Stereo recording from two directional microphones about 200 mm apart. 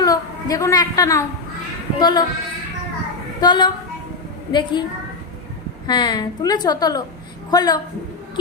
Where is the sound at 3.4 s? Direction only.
20° left (ahead or behind).